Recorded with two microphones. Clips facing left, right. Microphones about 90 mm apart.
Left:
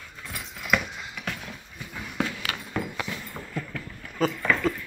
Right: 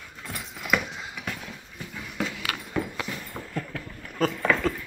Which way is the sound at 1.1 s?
5° right (ahead or behind).